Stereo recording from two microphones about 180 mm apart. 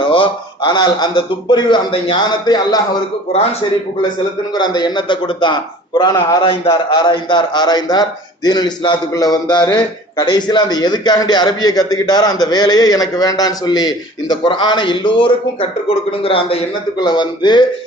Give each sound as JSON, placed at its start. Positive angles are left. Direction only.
{"t": 0.0, "sound": "a man's voice", "side_deg": 25}
{"t": 4.5, "sound": "a man's voice", "side_deg": 25}